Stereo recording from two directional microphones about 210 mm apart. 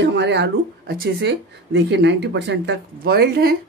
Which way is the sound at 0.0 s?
55° right (ahead or behind).